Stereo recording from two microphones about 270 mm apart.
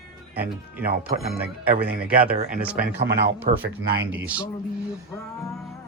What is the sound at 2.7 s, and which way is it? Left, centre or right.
Speech, right.